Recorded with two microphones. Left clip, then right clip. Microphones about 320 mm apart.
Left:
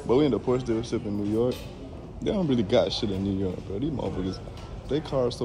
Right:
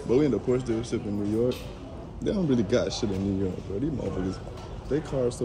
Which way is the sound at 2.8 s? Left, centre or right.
Centre.